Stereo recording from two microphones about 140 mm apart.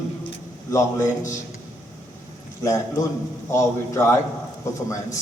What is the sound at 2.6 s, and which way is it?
A man's voice, 20° left (ahead or behind).